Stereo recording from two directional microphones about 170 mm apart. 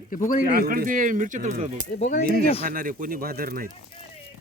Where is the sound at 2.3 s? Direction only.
60° right (ahead or behind).